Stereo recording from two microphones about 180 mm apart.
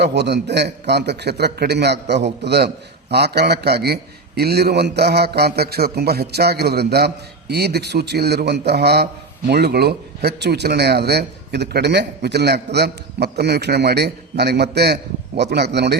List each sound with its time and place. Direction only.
0.0 s a man's voice: 65° right (ahead or behind)